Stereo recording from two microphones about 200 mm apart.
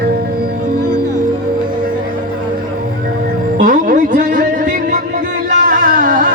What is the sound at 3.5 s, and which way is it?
Music, 40° right (ahead or behind).